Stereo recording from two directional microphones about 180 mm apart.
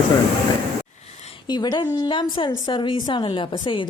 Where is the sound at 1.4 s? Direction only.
25° left (ahead or behind).